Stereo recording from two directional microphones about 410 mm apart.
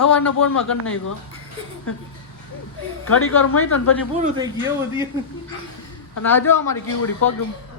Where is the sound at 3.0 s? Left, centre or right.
Left.